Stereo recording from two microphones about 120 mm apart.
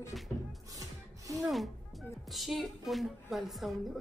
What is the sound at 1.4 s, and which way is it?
Speech, centre (ahead or behind).